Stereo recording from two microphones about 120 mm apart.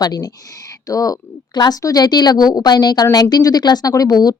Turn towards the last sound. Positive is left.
turn(degrees=35)  # may be behind; listen again after turning